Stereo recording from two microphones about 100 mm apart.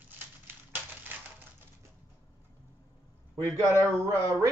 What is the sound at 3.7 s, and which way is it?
Speech, 30° right (ahead or behind).